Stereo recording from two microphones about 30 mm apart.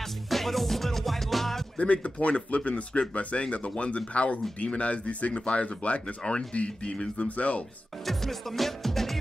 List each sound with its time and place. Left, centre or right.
0.3 s music: centre
1.8 s speech: left
3.2 s speech: left
3.7 s speech: left
8.0 s music: centre